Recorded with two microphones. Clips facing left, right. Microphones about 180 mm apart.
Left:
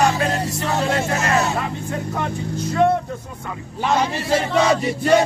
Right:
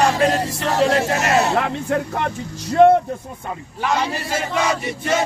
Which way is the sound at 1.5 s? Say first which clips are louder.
Right 5 dB; 75° right (ahead or behind).